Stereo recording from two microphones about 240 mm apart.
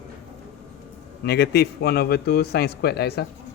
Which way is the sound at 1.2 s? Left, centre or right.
Left.